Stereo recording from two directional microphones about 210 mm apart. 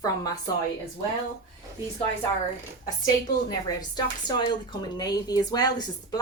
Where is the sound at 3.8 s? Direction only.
20° left (ahead or behind).